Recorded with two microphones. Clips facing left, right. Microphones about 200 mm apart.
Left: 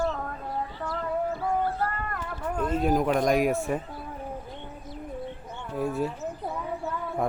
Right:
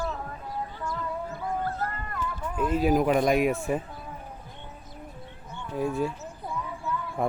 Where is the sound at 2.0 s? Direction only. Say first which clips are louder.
Left 1 dB; 55° left (ahead or behind).